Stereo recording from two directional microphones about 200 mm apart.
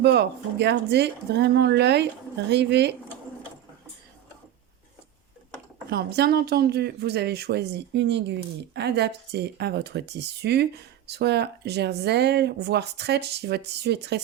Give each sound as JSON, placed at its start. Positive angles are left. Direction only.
{"t": 0.0, "sound": "speech", "side_deg": -55}
{"t": 5.9, "sound": "speech", "side_deg": -55}